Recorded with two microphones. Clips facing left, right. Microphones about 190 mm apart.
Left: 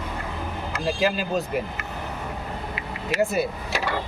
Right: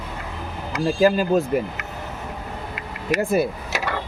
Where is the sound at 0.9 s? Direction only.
45° right (ahead or behind).